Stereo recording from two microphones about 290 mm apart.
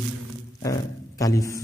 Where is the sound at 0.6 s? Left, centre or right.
Centre.